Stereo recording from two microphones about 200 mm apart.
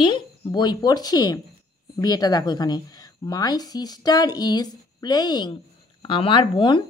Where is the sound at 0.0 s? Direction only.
20° left (ahead or behind).